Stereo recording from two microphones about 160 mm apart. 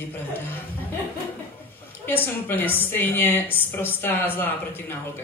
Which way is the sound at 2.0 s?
15° left (ahead or behind).